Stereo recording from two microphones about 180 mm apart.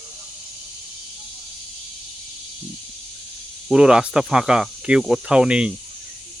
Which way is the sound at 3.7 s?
5° right (ahead or behind).